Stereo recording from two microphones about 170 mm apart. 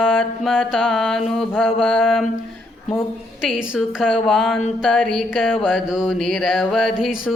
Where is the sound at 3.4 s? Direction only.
5° right (ahead or behind).